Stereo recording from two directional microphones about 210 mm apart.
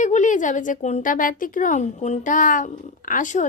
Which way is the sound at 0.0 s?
35° left (ahead or behind).